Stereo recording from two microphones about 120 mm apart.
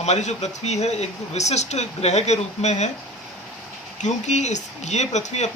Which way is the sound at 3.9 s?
75° left (ahead or behind).